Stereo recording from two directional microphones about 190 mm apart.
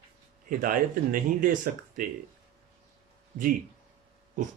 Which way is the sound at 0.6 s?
45° right (ahead or behind).